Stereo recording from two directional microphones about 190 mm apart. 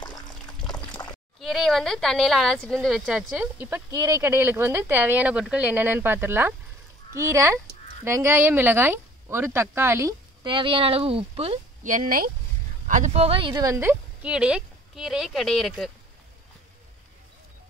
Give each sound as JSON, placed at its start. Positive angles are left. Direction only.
{"t": 0.0, "sound": "water", "side_deg": 20}
{"t": 1.0, "sound": "a sound", "side_deg": 15}
{"t": 1.4, "sound": "speech", "side_deg": 0}